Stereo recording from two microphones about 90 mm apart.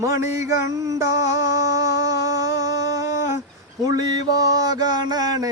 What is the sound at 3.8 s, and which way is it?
Mantra, 40° right (ahead or behind).